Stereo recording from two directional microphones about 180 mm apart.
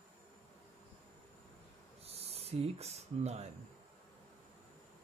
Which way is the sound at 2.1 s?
35° right (ahead or behind).